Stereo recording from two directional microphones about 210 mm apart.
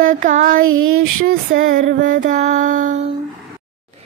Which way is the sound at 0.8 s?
80° right.